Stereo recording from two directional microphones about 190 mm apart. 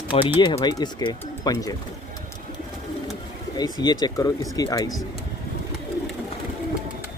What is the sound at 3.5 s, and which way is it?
Speech, 20° left (ahead or behind).